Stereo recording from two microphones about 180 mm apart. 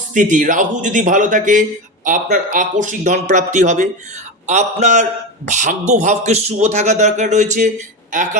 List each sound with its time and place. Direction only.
0.1 s speech: 45° right (ahead or behind)